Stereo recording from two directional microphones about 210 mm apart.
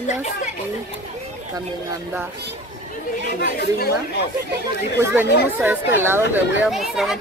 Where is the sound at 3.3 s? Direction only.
45° left (ahead or behind).